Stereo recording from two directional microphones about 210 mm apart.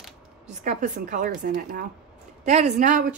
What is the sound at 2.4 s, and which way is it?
Speech, 35° right (ahead or behind).